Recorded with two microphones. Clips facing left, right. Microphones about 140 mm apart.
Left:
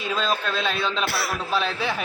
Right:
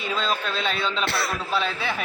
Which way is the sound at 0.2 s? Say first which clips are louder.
Left 2 dB; 10° left (ahead or behind).